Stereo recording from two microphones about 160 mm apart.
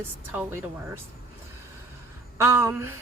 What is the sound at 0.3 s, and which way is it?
Speech, 15° right (ahead or behind).